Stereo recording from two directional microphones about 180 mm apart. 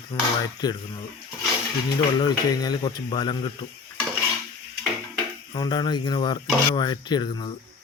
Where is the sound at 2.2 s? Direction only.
25° left (ahead or behind).